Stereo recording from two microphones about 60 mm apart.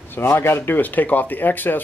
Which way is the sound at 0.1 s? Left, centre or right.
Left.